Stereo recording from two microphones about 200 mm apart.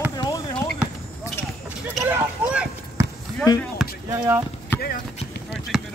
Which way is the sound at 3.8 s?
Centre (ahead or behind).